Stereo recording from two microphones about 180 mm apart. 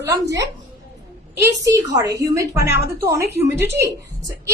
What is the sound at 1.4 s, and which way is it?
Speech, 20° right (ahead or behind).